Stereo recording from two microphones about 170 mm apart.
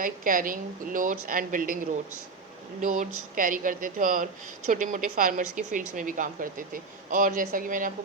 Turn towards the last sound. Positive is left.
turn(degrees=-50)  # may be behind; listen again after turning